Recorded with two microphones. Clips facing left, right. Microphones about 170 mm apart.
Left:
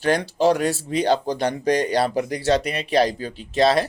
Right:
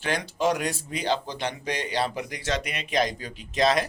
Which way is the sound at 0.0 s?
35° left (ahead or behind).